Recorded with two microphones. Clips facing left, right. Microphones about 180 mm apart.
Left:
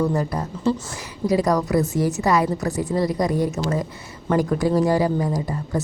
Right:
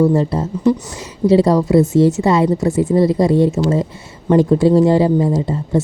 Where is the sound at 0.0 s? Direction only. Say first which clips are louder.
Right 8 dB; 25° right (ahead or behind).